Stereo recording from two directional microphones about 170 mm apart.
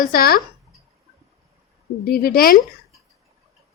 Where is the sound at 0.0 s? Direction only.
60° left (ahead or behind).